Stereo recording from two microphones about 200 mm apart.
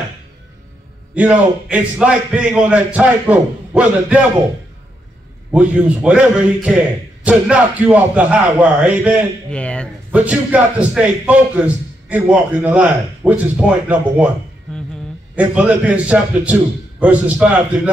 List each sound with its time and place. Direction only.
1.1 s a man's voice: 5° right (ahead or behind)
5.5 s a man's voice: 5° right (ahead or behind)
9.5 s a man's voice: 5° left (ahead or behind)
10.1 s a man's voice: 5° right (ahead or behind)
15.3 s a man's voice: 5° right (ahead or behind)